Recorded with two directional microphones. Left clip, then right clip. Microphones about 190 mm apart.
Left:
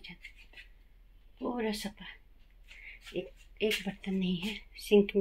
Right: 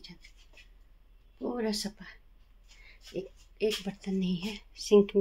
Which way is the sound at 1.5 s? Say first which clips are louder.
Right 2 dB; 5° right (ahead or behind).